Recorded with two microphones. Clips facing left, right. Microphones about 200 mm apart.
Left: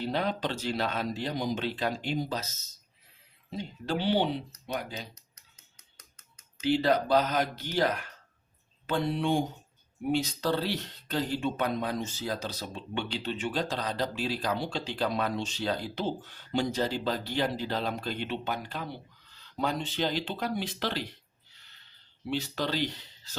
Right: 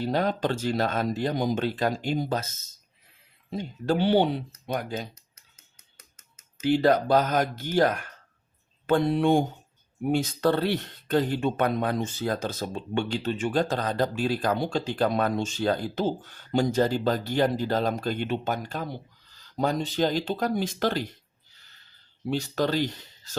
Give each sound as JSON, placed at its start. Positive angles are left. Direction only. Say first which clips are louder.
{"t": 0.0, "sound": "speech", "louder": "right 5 dB", "side_deg": -45}
{"t": 5.3, "sound": "a sound", "louder": "right 1 dB", "side_deg": -5}
{"t": 6.6, "sound": "speech", "louder": "right 4 dB", "side_deg": -45}
{"t": 22.3, "sound": "speech", "louder": "right 5 dB", "side_deg": -45}